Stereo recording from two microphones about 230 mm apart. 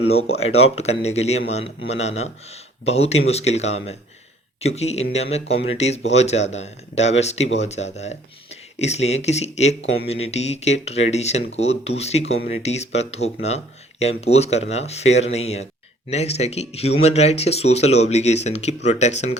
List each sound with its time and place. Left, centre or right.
0.1 s speech: left